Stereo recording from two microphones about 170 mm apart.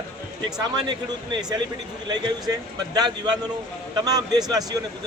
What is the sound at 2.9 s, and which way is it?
Speech, 25° right (ahead or behind).